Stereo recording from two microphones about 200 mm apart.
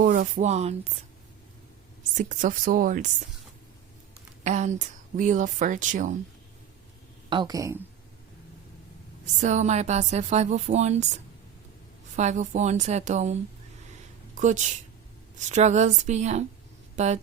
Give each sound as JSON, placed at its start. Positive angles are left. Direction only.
{"t": 0.0, "sound": "speech", "side_deg": -40}
{"t": 2.1, "sound": "speech", "side_deg": -40}
{"t": 4.4, "sound": "speech", "side_deg": -35}
{"t": 7.3, "sound": "speech", "side_deg": -20}
{"t": 9.4, "sound": "speech", "side_deg": -35}
{"t": 12.1, "sound": "speech", "side_deg": -35}